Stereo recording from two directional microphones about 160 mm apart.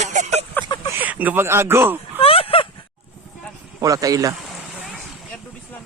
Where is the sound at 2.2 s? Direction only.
35° left (ahead or behind).